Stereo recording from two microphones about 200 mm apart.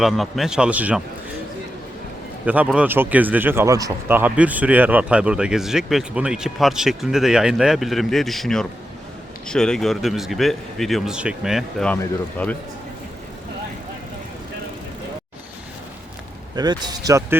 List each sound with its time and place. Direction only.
0.0 s speech: centre (ahead or behind)
2.4 s speech: 5° right (ahead or behind)
16.6 s speech: 20° right (ahead or behind)